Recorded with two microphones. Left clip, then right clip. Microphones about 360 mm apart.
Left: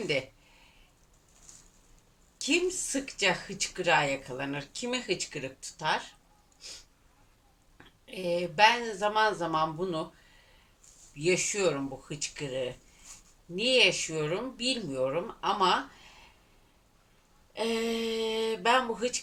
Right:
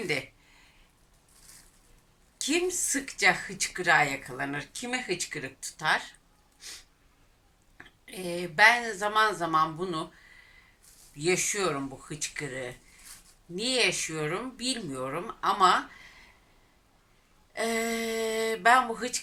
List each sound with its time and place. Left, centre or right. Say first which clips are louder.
2.4 s speech: even; centre
8.0 s speech: left 4 dB; centre
11.2 s speech: even; centre
17.5 s speech: right 1 dB; centre